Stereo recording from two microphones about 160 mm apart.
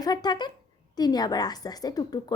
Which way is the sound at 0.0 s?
25° left (ahead or behind).